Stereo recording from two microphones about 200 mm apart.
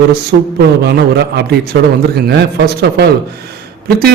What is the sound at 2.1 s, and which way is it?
Speech, 55° right (ahead or behind).